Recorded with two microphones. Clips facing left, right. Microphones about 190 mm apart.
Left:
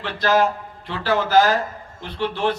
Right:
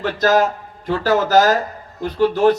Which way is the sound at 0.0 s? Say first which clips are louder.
Right 3 dB; 45° right (ahead or behind).